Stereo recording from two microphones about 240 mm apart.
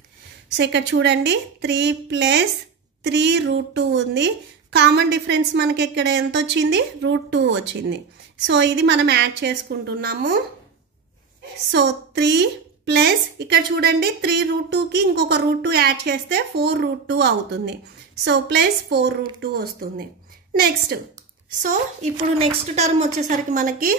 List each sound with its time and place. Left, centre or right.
0.6 s a woman's voice: right
11.7 s a woman's voice: right
21.6 s a woman's voice: right